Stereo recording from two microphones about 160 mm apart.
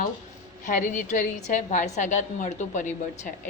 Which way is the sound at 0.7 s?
55° left (ahead or behind).